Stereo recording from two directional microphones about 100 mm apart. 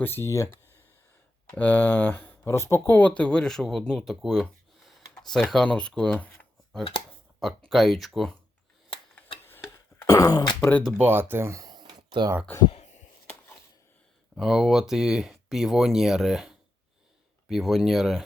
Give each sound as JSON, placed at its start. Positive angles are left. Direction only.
{"t": 0.0, "sound": "speech", "side_deg": 25}
{"t": 1.5, "sound": "speech", "side_deg": 15}
{"t": 7.3, "sound": "speech", "side_deg": 0}
{"t": 10.1, "sound": "speech", "side_deg": 40}
{"t": 11.0, "sound": "speech", "side_deg": -20}
{"t": 11.6, "sound": "a sound", "side_deg": -45}
{"t": 14.3, "sound": "speech", "side_deg": -5}